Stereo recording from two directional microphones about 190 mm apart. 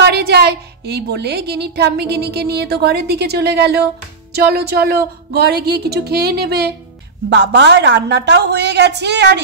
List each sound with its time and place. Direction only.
0.0 s a woman's voice: 60° right (ahead or behind)